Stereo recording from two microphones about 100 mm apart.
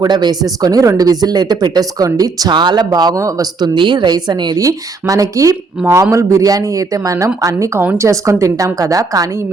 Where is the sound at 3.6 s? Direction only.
50° right (ahead or behind).